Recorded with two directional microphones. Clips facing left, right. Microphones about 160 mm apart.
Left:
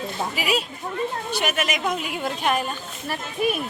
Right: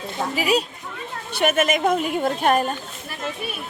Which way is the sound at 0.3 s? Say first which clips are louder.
Right 6 dB; 40° right (ahead or behind).